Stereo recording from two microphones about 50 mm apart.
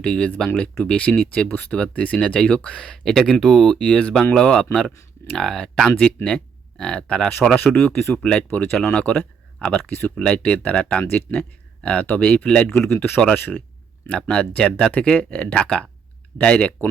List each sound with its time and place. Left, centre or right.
0.0 s speech: left
7.4 s speech: left
8.4 s speech: left
9.0 s speech: left
9.8 s speech: left
10.2 s speech: left
12.5 s speech: centre
12.8 s speech: left